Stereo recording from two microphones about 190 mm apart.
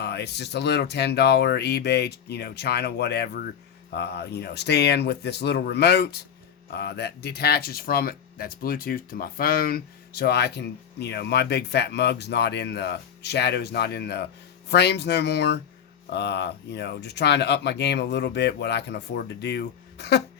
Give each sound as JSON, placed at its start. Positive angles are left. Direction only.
{"t": 0.0, "sound": "speech", "side_deg": 60}